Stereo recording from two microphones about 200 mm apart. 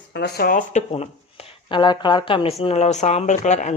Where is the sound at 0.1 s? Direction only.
55° left (ahead or behind).